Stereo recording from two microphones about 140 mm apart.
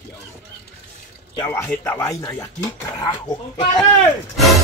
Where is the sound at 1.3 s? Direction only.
20° left (ahead or behind).